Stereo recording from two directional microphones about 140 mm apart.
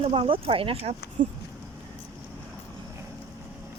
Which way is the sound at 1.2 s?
65° right (ahead or behind).